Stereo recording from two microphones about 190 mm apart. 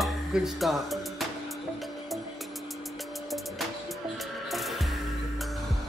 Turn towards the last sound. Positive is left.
turn(degrees=0)  # may be behind; listen again after turning